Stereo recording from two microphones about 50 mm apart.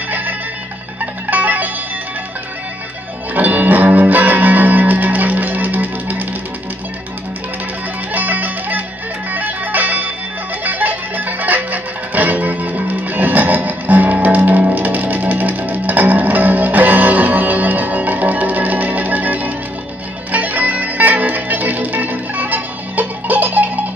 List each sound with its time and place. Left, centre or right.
0.1 s music: right
3.3 s music: right
8.1 s music: right